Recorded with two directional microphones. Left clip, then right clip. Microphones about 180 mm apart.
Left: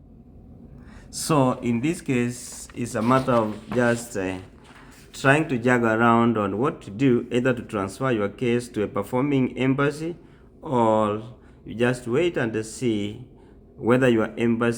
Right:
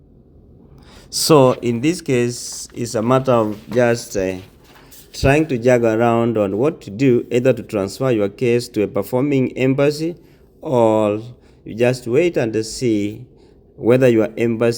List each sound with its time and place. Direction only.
1.1 s speech: 40° right (ahead or behind)
3.8 s speech: 20° right (ahead or behind)